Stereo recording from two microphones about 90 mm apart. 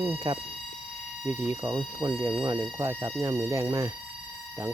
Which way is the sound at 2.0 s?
25° right (ahead or behind).